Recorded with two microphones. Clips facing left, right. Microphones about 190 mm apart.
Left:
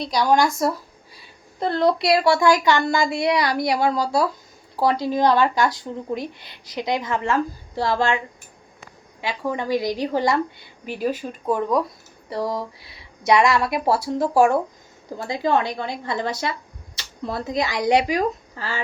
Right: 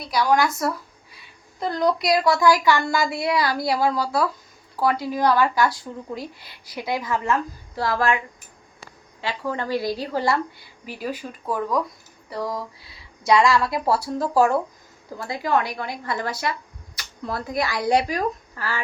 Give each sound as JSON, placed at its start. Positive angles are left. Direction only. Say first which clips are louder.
{"t": 0.0, "sound": "speech", "louder": "left 2 dB", "side_deg": 25}
{"t": 9.2, "sound": "a woman's voice", "louder": "left 2 dB", "side_deg": 15}